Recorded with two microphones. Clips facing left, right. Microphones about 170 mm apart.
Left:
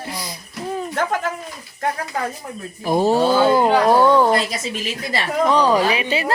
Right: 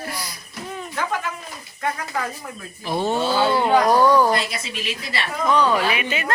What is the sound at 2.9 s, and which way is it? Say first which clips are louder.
Speech: left 6 dB; 40° left (ahead or behind).